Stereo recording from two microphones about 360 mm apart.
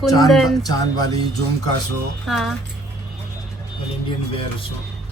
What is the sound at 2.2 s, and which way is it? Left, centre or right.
Speech, centre.